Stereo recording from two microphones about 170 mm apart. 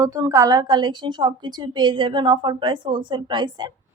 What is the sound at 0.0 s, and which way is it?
A woman's voice, 20° right (ahead or behind).